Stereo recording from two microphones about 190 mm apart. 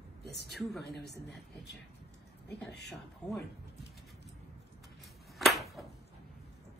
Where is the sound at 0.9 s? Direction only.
60° left (ahead or behind).